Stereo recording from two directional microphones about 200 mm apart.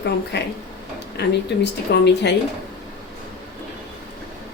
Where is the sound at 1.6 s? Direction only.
60° left (ahead or behind).